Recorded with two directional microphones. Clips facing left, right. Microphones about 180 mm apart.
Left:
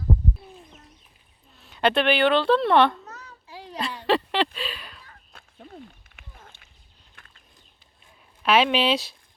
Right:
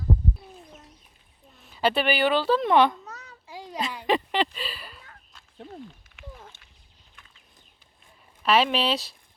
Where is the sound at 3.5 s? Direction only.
15° right (ahead or behind).